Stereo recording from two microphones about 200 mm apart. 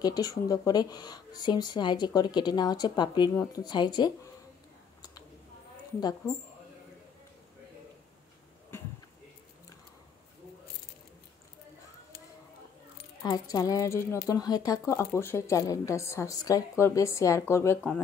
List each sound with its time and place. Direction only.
0.0 s speech: 20° left (ahead or behind)
5.9 s speech: 20° left (ahead or behind)
8.7 s a sound: 10° left (ahead or behind)
13.2 s speech: 20° left (ahead or behind)